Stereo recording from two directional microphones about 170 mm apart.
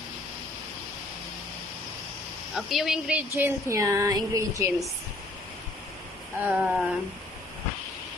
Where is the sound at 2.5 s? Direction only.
Centre (ahead or behind); by 4.8 s 20° right (ahead or behind).